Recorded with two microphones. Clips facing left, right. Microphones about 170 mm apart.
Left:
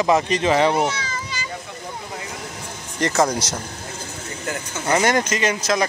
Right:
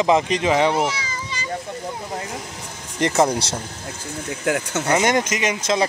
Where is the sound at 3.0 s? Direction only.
25° right (ahead or behind).